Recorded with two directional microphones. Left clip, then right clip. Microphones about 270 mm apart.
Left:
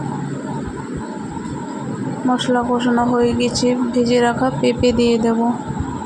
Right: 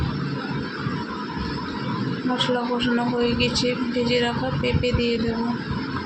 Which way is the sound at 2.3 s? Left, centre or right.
Left.